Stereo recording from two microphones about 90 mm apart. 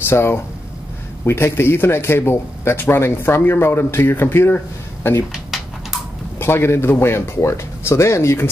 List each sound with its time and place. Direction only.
0.0 s speech: 25° left (ahead or behind)
5.3 s bird: 5° right (ahead or behind)
6.4 s speech: 25° left (ahead or behind)